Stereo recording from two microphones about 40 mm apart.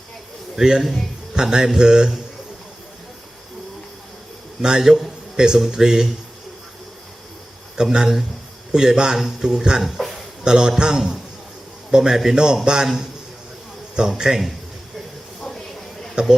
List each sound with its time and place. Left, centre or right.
0.8 s a man's voice: centre
1.3 s speech: centre
4.6 s speech: centre
7.8 s speech: centre
9.8 s a sound: centre
10.4 s speech: centre
14.2 s speech: centre
15.4 s a sound: centre
16.2 s speech: centre